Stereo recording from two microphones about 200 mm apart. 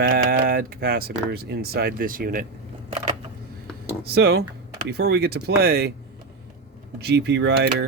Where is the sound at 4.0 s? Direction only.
55° right (ahead or behind).